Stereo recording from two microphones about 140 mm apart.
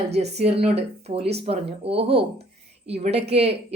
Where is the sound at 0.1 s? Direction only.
50° right (ahead or behind).